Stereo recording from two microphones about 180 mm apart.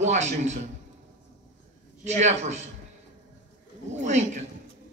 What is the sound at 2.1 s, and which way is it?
Speech, 40° right (ahead or behind).